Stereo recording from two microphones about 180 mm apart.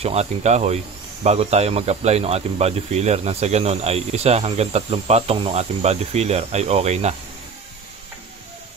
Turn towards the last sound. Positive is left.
turn(degrees=-35)  # may be behind; listen again after turning